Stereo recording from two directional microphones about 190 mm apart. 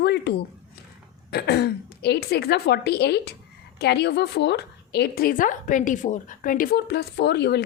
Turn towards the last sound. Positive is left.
turn(degrees=60)  # may be behind; listen again after turning